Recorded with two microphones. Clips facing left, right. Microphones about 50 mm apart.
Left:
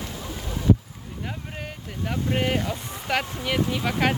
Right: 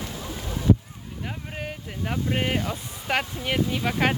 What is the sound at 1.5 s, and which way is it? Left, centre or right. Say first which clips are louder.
Speech: right 1 dB; centre.